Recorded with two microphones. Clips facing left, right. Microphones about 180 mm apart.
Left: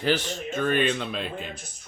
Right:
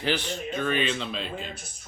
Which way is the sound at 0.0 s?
40° left (ahead or behind).